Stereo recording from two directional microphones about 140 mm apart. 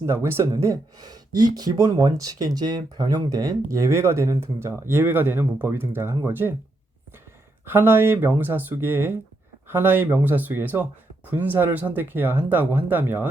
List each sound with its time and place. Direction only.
0.0 s speech: 20° right (ahead or behind)
7.6 s speech: 15° right (ahead or behind)